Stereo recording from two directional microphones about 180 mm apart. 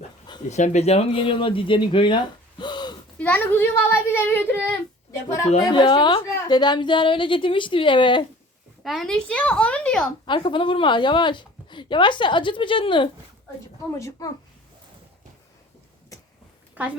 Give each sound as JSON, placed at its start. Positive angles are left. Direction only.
{"t": 0.4, "sound": "speech", "side_deg": 40}
{"t": 3.2, "sound": "a child's voice", "side_deg": 10}
{"t": 5.6, "sound": "a woman's voice", "side_deg": 25}
{"t": 8.8, "sound": "speech", "side_deg": 0}
{"t": 10.2, "sound": "a woman's voice", "side_deg": 25}
{"t": 16.7, "sound": "a woman's voice", "side_deg": -10}